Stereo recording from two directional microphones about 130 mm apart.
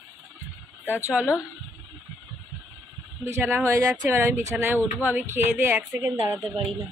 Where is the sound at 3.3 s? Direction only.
20° right (ahead or behind).